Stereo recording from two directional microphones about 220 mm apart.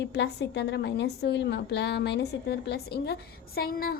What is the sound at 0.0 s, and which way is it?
A woman's voice, 50° left (ahead or behind).